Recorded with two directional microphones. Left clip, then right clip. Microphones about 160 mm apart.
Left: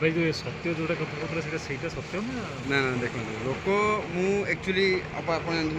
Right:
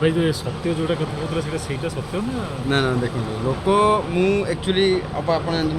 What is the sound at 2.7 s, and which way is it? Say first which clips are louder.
Speech: right 5 dB; 25° right (ahead or behind).